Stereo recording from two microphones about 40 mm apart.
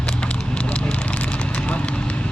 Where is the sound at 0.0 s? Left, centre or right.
Left.